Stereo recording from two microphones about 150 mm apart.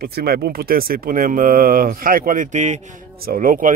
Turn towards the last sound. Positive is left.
turn(degrees=-65)  # may be behind; listen again after turning